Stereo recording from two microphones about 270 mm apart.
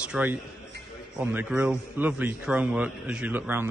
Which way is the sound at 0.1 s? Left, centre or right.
Centre.